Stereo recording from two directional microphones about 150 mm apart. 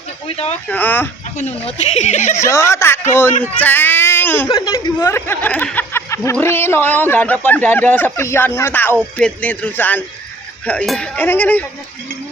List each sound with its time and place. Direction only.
0.3 s speech: 45° left (ahead or behind)
0.7 s a man's voice: 10° left (ahead or behind)
1.4 s speech: 50° left (ahead or behind)
2.4 s a man's voice: 20° left (ahead or behind)
4.4 s a man's voice: 25° left (ahead or behind)